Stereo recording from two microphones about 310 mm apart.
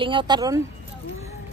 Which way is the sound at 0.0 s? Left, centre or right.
Centre.